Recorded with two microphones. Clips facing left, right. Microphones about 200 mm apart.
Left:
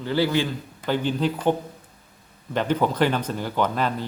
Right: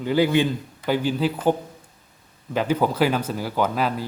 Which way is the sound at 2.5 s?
5° right (ahead or behind).